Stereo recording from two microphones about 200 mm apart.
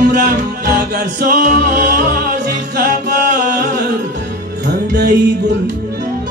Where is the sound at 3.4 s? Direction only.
50° right (ahead or behind).